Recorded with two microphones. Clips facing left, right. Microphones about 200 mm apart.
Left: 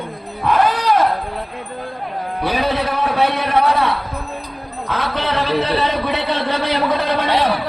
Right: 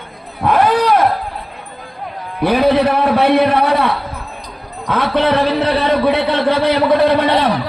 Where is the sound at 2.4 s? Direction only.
60° right (ahead or behind).